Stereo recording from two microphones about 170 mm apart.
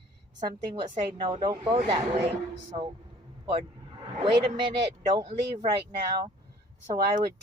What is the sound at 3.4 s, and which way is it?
Speech, 30° right (ahead or behind).